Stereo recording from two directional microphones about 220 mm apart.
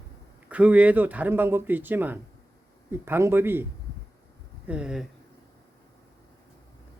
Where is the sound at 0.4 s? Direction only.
5° right (ahead or behind).